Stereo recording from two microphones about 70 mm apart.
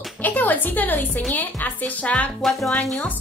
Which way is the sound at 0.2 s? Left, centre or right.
Left.